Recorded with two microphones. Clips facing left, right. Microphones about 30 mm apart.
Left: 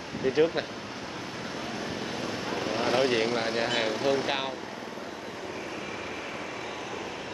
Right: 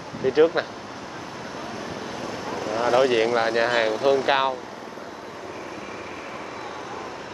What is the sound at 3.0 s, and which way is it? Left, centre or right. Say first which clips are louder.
Speech: right 6 dB; centre.